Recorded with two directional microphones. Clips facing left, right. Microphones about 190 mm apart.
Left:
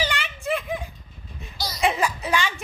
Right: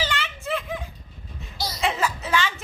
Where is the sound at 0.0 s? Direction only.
15° left (ahead or behind).